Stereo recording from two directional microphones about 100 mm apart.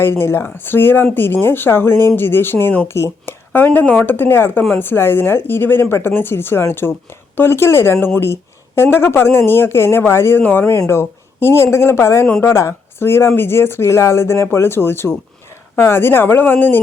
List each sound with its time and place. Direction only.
0.0 s speech: 25° left (ahead or behind)